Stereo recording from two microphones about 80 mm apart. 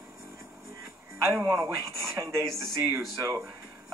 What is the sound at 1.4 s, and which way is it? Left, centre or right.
Speech, right.